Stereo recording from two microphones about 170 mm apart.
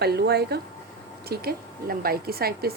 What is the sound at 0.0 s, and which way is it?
A woman's voice, 70° right (ahead or behind).